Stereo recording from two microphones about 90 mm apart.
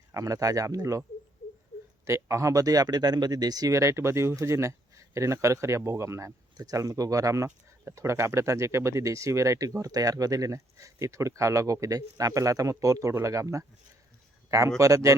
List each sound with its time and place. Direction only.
0.1 s speech: 40° right (ahead or behind)
2.0 s speech: 30° right (ahead or behind)
3.7 s speech: 30° right (ahead or behind)
14.8 s speech: 35° right (ahead or behind)